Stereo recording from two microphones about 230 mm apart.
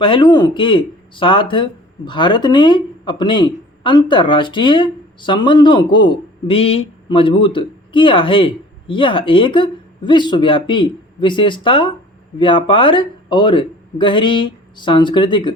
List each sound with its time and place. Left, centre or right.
0.0 s speech: left